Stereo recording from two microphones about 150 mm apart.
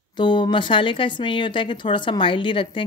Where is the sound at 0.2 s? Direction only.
30° left (ahead or behind).